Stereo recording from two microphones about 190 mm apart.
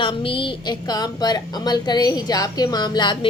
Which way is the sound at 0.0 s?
25° left (ahead or behind).